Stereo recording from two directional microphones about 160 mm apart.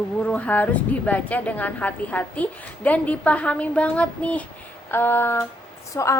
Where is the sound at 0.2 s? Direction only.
5° left (ahead or behind).